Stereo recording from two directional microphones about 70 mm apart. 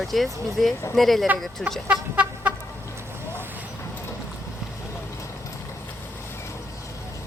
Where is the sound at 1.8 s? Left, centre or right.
Centre.